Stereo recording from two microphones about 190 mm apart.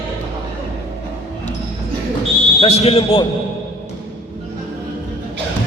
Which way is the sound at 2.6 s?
35° left (ahead or behind).